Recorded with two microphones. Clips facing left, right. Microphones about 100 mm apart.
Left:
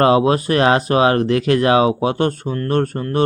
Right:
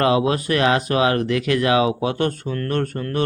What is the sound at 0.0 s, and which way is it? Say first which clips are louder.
Speech: left 4 dB; 35° left (ahead or behind).